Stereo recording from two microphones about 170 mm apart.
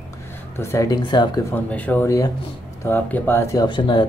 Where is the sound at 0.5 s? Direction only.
15° left (ahead or behind).